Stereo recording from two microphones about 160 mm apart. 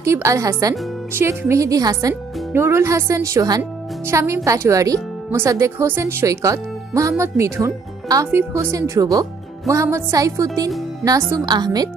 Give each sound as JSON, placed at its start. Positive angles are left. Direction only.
{"t": 0.0, "sound": "speech", "side_deg": -20}